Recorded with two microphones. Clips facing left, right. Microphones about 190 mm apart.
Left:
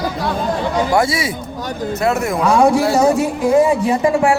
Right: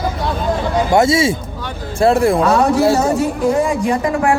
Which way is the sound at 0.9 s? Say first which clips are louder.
Right 4 dB; 25° right (ahead or behind).